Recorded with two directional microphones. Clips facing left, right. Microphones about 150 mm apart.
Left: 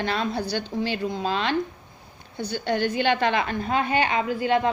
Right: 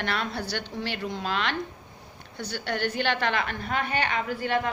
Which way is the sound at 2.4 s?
15° left (ahead or behind).